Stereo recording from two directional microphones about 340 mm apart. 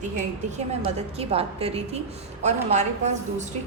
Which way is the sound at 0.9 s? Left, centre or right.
Centre.